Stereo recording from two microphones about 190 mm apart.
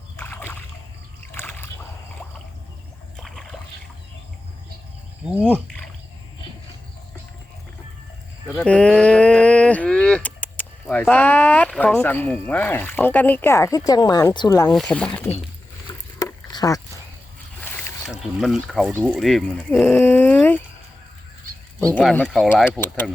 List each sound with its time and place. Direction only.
0.2 s rowboat: 10° left (ahead or behind)
1.3 s a sound: 10° left (ahead or behind)
3.2 s a sound: centre (ahead or behind)
5.4 s speech: 5° left (ahead or behind)
8.5 s speech: 5° left (ahead or behind)
14.8 s speech: 5° left (ahead or behind)
15.9 s a sound: 20° left (ahead or behind)
18.1 s speech: centre (ahead or behind)
19.8 s speech: 10° left (ahead or behind)
21.8 s speech: 5° left (ahead or behind)